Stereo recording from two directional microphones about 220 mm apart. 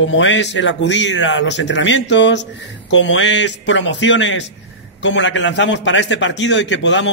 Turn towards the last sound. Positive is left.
turn(degrees=55)  # may be behind; listen again after turning